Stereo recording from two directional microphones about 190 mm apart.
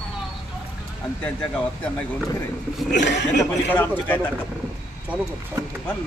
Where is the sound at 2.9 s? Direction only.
65° left (ahead or behind).